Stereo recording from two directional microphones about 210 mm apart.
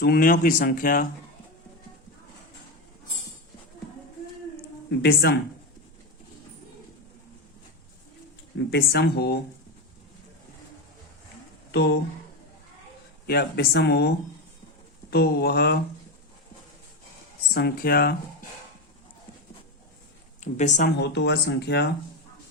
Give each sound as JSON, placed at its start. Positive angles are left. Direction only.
{"t": 0.0, "sound": "speech", "side_deg": 45}
{"t": 4.9, "sound": "speech", "side_deg": 50}
{"t": 8.5, "sound": "speech", "side_deg": 50}
{"t": 11.7, "sound": "speech", "side_deg": 55}
{"t": 13.2, "sound": "speech", "side_deg": 45}
{"t": 17.5, "sound": "speech", "side_deg": 50}
{"t": 20.4, "sound": "speech", "side_deg": 35}
{"t": 21.0, "sound": "speech", "side_deg": 55}